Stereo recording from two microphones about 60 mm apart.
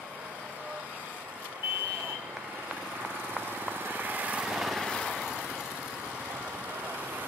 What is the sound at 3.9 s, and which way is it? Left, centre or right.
Vehicle, right.